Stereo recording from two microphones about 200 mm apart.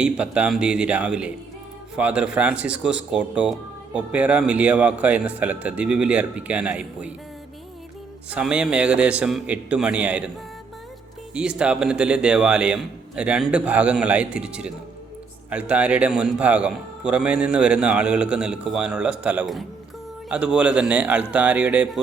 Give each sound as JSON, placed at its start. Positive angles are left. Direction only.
{"t": 0.0, "sound": "a man's voice", "side_deg": -5}
{"t": 8.3, "sound": "a man's voice", "side_deg": -5}
{"t": 11.3, "sound": "a man's voice", "side_deg": -5}